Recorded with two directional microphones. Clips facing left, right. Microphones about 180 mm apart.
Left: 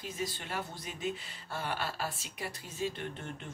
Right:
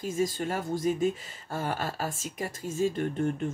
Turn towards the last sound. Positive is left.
turn(degrees=-45)  # may be behind; listen again after turning